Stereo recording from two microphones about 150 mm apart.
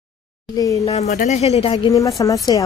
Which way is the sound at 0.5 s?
20° left (ahead or behind).